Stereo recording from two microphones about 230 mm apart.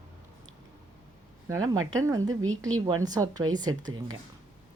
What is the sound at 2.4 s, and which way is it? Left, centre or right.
Speech, right.